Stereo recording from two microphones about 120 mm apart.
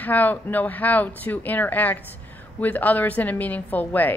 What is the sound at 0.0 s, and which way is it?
A woman's voice, 15° left (ahead or behind).